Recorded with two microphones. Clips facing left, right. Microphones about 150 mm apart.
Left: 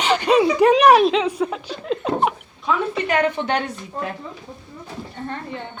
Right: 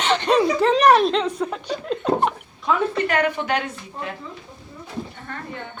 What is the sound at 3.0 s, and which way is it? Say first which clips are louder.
Speech: left 1 dB; 25° left (ahead or behind).